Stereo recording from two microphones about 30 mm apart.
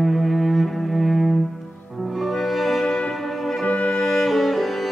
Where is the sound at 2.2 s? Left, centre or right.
Centre.